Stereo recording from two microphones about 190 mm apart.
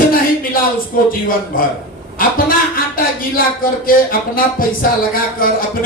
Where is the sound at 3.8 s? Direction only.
50° left (ahead or behind).